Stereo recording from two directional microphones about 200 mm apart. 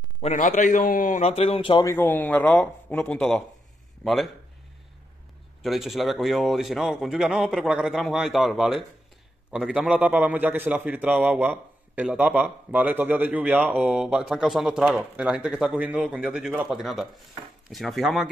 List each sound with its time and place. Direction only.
0.2 s a man's voice: 35° left (ahead or behind)
2.0 s speech: 10° left (ahead or behind)
5.6 s a man's voice: centre (ahead or behind)